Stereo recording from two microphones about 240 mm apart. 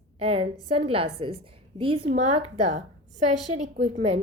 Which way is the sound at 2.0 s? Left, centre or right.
Right.